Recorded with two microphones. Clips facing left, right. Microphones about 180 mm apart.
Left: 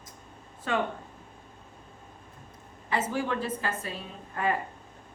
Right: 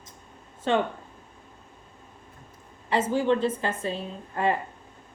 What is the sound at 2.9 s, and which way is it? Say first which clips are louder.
A woman's voice: right 6 dB; 30° right (ahead or behind).